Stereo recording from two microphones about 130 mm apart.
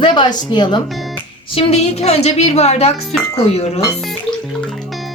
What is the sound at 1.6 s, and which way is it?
A woman's voice, 55° left (ahead or behind).